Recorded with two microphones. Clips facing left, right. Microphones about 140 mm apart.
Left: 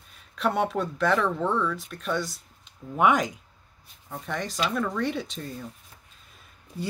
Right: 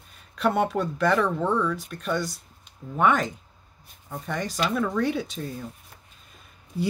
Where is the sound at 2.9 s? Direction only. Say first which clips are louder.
Even; 10° left (ahead or behind).